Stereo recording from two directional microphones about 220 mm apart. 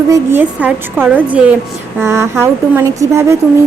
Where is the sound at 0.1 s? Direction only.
10° right (ahead or behind).